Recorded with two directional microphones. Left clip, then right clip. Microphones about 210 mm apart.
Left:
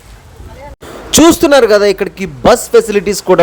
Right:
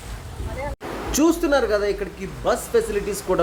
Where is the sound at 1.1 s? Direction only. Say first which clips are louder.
Left 13 dB; 45° left (ahead or behind).